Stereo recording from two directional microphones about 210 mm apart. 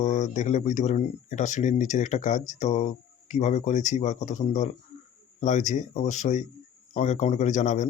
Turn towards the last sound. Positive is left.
turn(degrees=35)  # may be behind; listen again after turning